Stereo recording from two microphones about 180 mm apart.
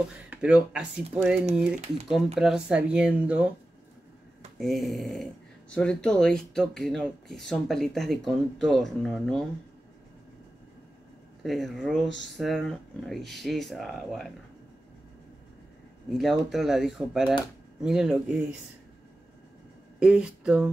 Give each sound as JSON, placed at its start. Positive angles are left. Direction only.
{"t": 0.3, "sound": "speech", "side_deg": -5}
{"t": 4.6, "sound": "speech", "side_deg": 0}
{"t": 11.4, "sound": "speech", "side_deg": 0}
{"t": 16.1, "sound": "speech", "side_deg": 0}
{"t": 20.0, "sound": "speech", "side_deg": -5}